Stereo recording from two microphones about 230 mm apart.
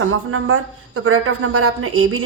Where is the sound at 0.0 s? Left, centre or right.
Right.